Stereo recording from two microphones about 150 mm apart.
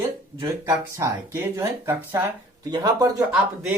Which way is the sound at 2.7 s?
25° right (ahead or behind).